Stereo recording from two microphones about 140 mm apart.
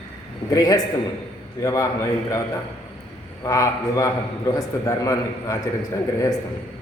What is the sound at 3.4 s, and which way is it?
A man's voice, 20° left (ahead or behind).